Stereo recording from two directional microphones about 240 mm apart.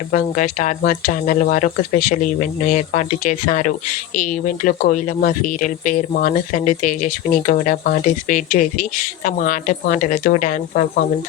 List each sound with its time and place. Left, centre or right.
0.1 s speech: left